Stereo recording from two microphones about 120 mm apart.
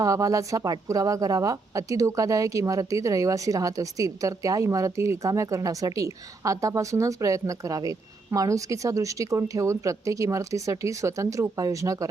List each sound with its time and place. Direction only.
0.0 s a woman's voice: 30° right (ahead or behind)